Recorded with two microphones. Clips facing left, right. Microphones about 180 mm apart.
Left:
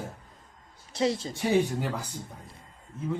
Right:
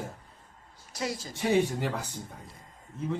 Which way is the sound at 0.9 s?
25° left (ahead or behind).